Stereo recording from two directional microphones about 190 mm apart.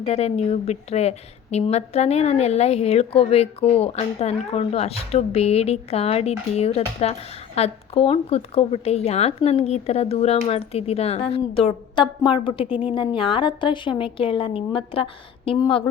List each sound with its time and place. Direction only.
0.0 s a woman's voice: 35° left (ahead or behind)